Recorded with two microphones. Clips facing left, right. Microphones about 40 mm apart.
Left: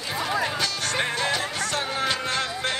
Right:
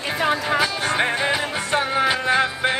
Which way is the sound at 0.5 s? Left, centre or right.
Centre.